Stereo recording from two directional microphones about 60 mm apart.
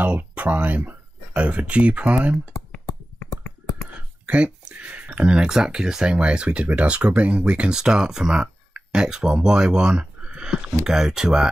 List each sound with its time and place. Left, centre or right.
0.0 s speech: right
3.2 s a sound: left
4.3 s speech: centre